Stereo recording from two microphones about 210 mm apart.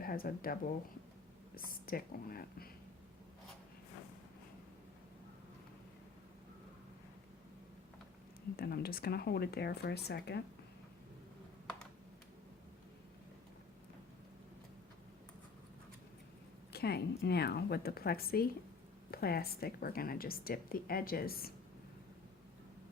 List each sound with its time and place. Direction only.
0.0 s a woman's voice: 45° left (ahead or behind)
8.5 s a woman's voice: 45° left (ahead or behind)
16.7 s a woman's voice: 50° left (ahead or behind)